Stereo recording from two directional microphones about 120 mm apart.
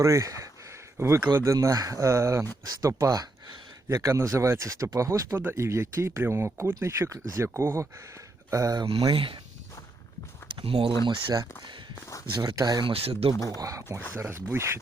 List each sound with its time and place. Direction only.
0.0 s speech: 25° right (ahead or behind)
9.1 s speech: 45° right (ahead or behind)
10.6 s speech: 50° right (ahead or behind)
11.0 s speech: 40° right (ahead or behind)
11.9 s speech: 25° left (ahead or behind)
12.3 s speech: 30° right (ahead or behind)
12.8 s speech: 55° right (ahead or behind)
13.3 s speech: 25° left (ahead or behind)
13.6 s speech: 30° right (ahead or behind)